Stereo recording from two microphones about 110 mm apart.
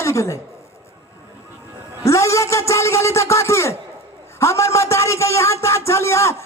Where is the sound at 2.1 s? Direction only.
25° left (ahead or behind).